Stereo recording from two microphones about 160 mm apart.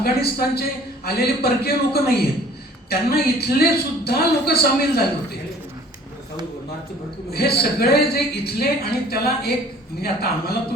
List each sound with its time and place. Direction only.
0.0 s a woman's voice: 75° left (ahead or behind)
7.3 s a man's voice: 80° left